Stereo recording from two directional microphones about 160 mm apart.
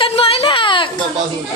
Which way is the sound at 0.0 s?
35° left (ahead or behind).